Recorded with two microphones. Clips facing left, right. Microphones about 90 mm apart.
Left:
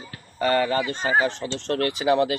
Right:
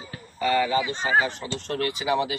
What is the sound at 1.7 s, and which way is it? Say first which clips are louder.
Speech: left 4 dB; 50° left (ahead or behind).